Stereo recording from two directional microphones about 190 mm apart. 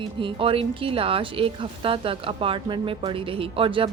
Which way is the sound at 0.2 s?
25° right (ahead or behind).